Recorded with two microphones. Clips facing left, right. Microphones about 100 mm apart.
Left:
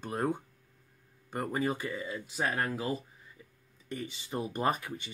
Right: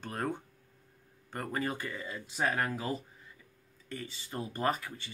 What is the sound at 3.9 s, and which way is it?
Speech, 20° left (ahead or behind).